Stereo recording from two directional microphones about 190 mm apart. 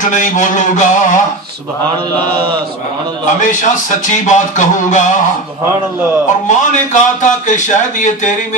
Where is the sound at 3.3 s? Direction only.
40° left (ahead or behind).